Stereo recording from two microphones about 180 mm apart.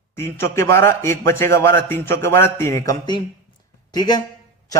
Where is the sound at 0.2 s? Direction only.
15° left (ahead or behind).